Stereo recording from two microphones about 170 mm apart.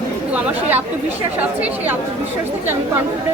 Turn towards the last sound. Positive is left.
turn(degrees=-10)  # may be behind; listen again after turning